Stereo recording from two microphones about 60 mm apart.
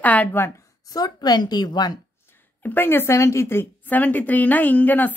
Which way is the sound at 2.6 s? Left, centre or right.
Left.